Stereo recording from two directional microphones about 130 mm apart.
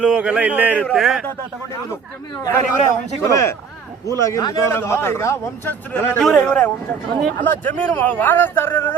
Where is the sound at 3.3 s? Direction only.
20° left (ahead or behind).